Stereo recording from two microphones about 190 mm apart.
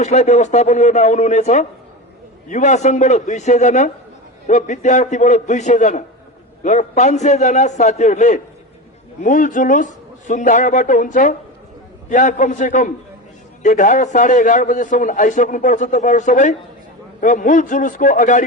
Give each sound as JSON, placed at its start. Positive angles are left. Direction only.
{"t": 0.0, "sound": "a man's voice", "side_deg": 35}